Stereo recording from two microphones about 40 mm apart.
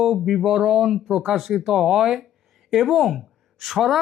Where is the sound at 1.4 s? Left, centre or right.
Centre.